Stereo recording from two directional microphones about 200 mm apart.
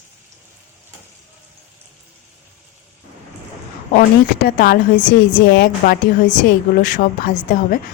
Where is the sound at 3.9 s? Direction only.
45° left (ahead or behind).